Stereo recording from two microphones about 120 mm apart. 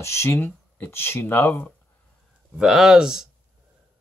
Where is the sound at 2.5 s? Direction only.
5° right (ahead or behind).